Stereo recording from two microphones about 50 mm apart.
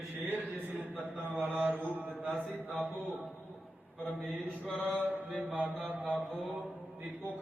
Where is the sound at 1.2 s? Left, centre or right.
Right.